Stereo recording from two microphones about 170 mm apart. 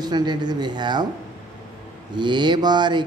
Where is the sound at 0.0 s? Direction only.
25° right (ahead or behind).